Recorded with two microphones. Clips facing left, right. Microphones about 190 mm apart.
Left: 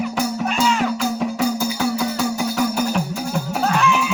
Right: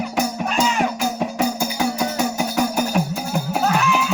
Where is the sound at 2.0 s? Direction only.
20° right (ahead or behind).